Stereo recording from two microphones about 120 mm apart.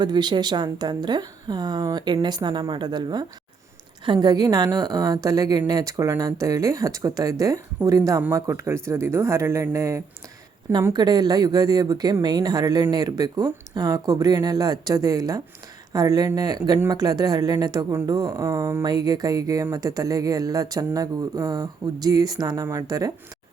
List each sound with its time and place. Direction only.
0.0 s speech: 35° right (ahead or behind)
10.9 s speech: 35° right (ahead or behind)